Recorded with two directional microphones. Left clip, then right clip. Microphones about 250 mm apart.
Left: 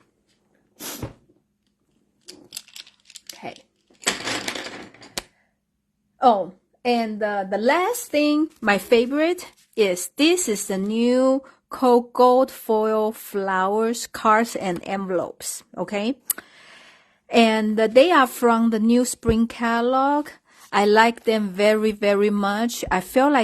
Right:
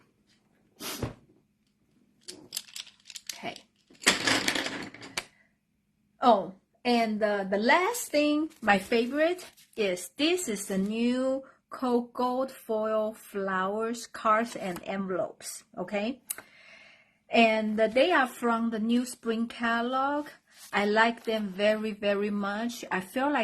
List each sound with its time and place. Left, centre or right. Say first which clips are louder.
0.8 s sneeze: left 3 dB; left
6.1 s a woman's voice: left 5 dB; left